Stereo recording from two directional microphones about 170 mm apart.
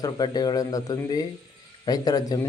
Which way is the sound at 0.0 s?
25° left (ahead or behind).